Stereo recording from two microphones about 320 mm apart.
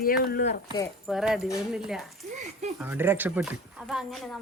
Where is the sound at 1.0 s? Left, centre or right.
Centre.